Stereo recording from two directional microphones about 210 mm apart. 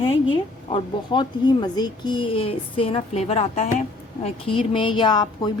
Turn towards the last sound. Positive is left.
turn(degrees=20)  # may be behind; listen again after turning